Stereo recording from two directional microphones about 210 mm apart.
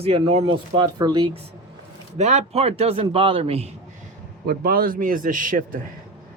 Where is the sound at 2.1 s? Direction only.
35° right (ahead or behind).